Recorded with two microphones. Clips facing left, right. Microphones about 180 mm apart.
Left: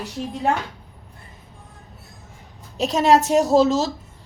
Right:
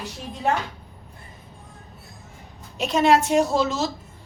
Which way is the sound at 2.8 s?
35° left (ahead or behind).